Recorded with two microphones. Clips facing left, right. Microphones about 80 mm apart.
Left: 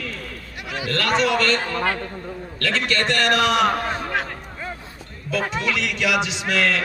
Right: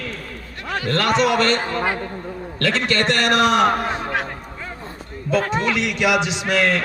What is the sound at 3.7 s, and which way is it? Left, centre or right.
Speech, centre.